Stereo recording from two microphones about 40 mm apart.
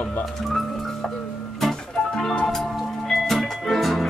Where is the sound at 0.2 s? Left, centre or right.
Centre.